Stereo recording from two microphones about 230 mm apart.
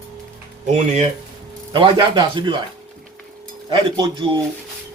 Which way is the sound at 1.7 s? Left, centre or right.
Right.